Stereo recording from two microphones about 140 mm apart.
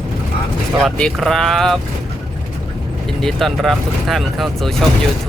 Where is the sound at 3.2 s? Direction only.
5° left (ahead or behind).